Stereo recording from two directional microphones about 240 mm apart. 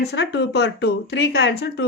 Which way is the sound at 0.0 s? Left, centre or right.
Left.